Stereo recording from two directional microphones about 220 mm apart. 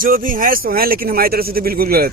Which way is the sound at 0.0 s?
40° right (ahead or behind).